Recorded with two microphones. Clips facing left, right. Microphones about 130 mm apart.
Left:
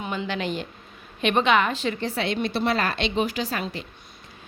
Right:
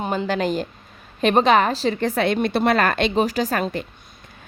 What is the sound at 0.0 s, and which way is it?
A woman's voice, 40° right (ahead or behind).